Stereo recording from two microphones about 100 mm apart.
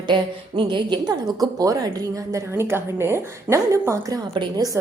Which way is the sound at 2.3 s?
25° right (ahead or behind).